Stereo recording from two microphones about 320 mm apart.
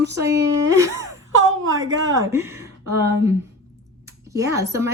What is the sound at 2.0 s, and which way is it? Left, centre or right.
Speech, centre.